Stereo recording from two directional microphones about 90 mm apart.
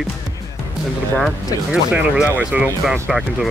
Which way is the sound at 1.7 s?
10° right (ahead or behind).